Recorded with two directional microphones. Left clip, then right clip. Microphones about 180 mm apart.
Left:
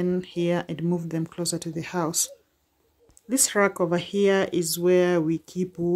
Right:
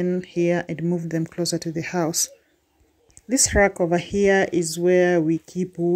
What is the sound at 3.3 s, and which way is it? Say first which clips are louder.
Speech: right 4 dB; 10° right (ahead or behind).